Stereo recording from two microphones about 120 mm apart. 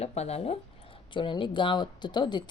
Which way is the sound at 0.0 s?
60° left (ahead or behind).